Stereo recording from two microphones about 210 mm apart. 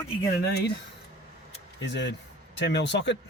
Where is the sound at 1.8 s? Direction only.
55° left (ahead or behind).